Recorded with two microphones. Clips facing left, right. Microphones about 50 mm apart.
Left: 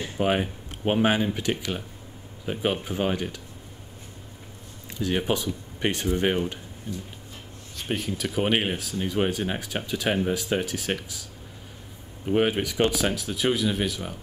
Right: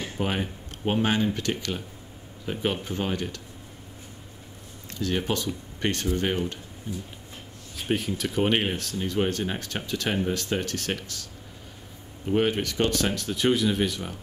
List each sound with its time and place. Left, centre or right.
0.2 s speech: centre
4.9 s speech: centre
7.7 s speech: centre
12.3 s speech: centre